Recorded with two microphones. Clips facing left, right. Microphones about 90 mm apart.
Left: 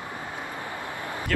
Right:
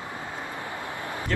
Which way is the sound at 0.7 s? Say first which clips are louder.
Even; 20° right (ahead or behind).